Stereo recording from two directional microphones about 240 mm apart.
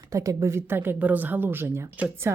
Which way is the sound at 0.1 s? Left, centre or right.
Centre.